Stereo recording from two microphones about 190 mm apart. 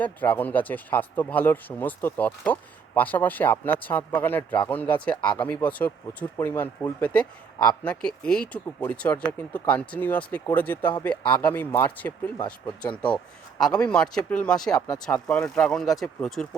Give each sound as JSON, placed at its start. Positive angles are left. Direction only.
{"t": 0.0, "sound": "speech", "side_deg": 10}
{"t": 14.7, "sound": "speech", "side_deg": 20}
{"t": 15.0, "sound": "speech", "side_deg": 5}